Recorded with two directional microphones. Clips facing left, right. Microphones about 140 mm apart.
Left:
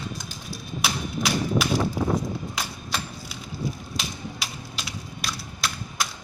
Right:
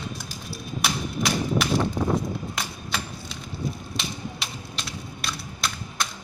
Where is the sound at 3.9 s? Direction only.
Centre (ahead or behind).